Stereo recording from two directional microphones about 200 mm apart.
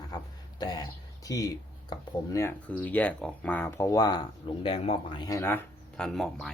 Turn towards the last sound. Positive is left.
turn(degrees=5)  # may be behind; listen again after turning